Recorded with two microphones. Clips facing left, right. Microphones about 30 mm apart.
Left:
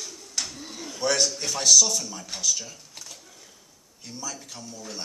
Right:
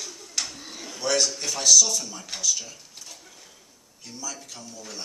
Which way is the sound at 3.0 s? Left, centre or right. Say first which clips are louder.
Even; centre.